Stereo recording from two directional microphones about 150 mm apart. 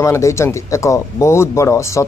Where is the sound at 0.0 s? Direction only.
20° left (ahead or behind).